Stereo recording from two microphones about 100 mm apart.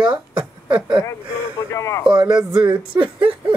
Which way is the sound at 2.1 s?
50° right (ahead or behind).